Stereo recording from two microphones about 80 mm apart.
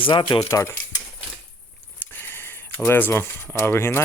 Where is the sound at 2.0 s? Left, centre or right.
Left.